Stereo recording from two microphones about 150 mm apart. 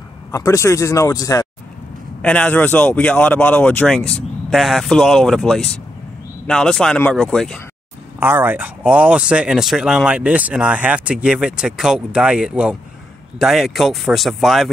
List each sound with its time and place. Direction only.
0.3 s speech: 20° left (ahead or behind)
2.2 s speech: 10° left (ahead or behind)
8.2 s speech: 15° right (ahead or behind)